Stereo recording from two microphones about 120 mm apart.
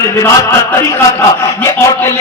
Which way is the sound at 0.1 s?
20° left (ahead or behind).